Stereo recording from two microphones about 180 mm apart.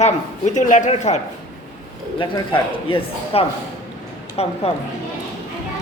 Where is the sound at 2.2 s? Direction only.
30° left (ahead or behind).